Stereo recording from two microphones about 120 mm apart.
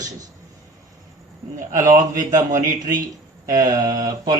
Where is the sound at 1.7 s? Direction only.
90° right.